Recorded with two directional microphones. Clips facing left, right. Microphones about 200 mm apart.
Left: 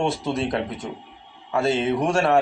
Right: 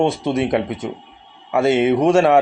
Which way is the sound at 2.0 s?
20° right (ahead or behind).